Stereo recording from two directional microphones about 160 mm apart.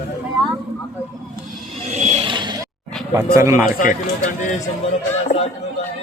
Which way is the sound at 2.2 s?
30° right (ahead or behind).